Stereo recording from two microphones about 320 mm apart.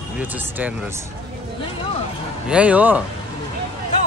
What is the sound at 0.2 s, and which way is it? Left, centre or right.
Speech, centre.